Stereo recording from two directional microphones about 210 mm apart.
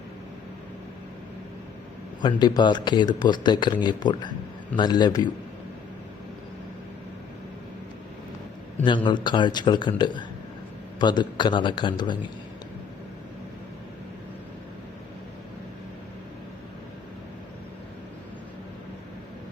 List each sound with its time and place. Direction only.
2.4 s speech: 20° left (ahead or behind)
8.8 s speech: 20° left (ahead or behind)